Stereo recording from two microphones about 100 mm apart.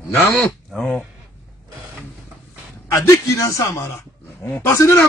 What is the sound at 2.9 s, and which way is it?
A man's voice, 30° left (ahead or behind).